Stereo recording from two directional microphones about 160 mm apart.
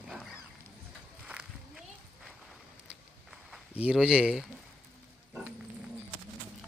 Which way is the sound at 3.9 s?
5° right (ahead or behind).